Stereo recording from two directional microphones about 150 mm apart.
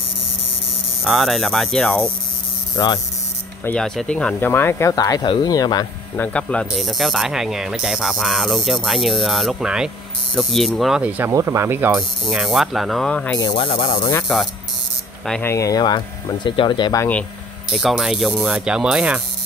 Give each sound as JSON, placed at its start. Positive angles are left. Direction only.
{"t": 1.0, "sound": "speech", "side_deg": 0}
{"t": 2.7, "sound": "mains hum", "side_deg": 30}
{"t": 3.6, "sound": "speech", "side_deg": 5}
{"t": 6.1, "sound": "speech", "side_deg": 10}
{"t": 10.3, "sound": "ratchet", "side_deg": 5}
{"t": 11.9, "sound": "speech", "side_deg": -5}
{"t": 13.4, "sound": "speech", "side_deg": 30}
{"t": 14.2, "sound": "speech", "side_deg": 0}
{"t": 15.4, "sound": "speech", "side_deg": 20}
{"t": 17.6, "sound": "speech", "side_deg": 0}